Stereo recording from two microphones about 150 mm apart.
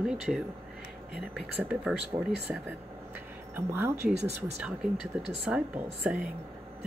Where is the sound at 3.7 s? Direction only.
15° right (ahead or behind).